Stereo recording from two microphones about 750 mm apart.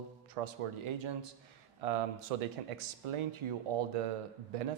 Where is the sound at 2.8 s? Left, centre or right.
Right.